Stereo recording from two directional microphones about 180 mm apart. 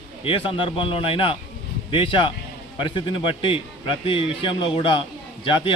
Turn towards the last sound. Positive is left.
turn(degrees=30)  # may be behind; listen again after turning